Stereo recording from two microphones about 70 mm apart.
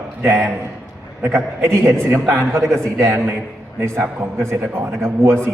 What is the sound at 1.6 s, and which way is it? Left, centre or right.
Speech, right.